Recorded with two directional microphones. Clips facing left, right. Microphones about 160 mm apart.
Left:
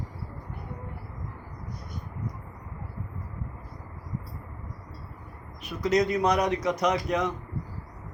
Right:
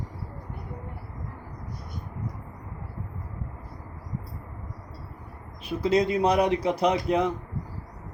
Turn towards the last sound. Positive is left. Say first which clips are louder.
# right 3 dB
turn(degrees=-30)  # may be behind; listen again after turning